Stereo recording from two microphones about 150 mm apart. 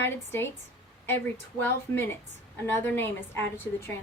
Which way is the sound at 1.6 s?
15° left (ahead or behind).